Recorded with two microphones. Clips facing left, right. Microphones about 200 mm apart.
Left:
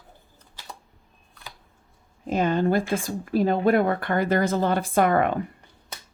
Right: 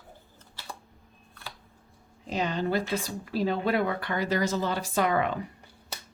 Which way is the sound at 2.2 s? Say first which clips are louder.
Left 7 dB; 50° left (ahead or behind).